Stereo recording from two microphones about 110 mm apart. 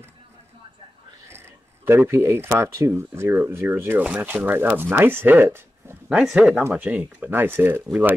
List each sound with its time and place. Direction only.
1.9 s speech: 20° right (ahead or behind)
6.0 s speech: 5° right (ahead or behind)
6.6 s speech: 15° right (ahead or behind)